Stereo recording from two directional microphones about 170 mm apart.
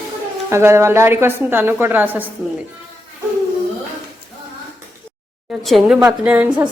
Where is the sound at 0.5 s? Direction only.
15° right (ahead or behind).